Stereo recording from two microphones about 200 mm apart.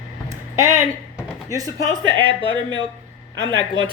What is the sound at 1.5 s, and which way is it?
Speech, 15° right (ahead or behind).